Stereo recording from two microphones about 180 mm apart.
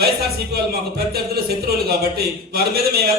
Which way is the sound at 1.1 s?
60° right (ahead or behind).